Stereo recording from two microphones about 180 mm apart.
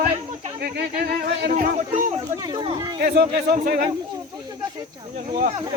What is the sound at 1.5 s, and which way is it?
Speech, 45° right (ahead or behind).